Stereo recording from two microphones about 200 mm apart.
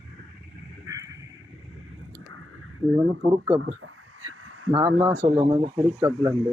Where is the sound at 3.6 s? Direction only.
90° right.